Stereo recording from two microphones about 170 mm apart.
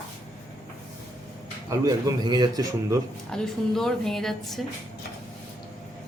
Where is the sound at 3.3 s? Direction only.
5° left (ahead or behind).